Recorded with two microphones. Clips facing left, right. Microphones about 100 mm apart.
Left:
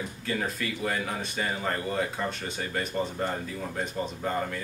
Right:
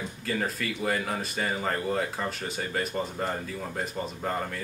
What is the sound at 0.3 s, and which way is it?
Speech, centre (ahead or behind).